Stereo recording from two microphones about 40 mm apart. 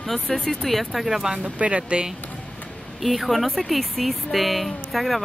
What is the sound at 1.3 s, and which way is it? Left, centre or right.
Speech, right.